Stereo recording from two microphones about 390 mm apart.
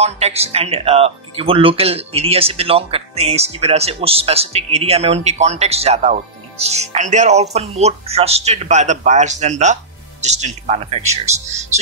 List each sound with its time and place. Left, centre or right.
0.0 s speech: centre